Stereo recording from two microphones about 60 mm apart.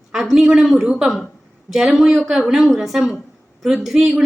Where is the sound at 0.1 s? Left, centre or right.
Centre.